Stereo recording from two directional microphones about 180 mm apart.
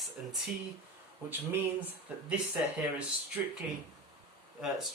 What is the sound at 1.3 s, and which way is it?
Speech, 10° right (ahead or behind).